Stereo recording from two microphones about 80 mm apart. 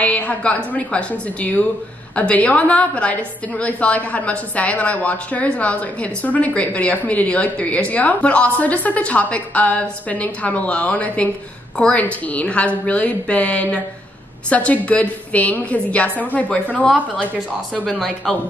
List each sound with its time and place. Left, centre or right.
0.0 s a woman's voice: centre
17.8 s a woman's voice: centre